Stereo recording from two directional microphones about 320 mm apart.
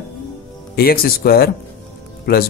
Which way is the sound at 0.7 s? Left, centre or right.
Left.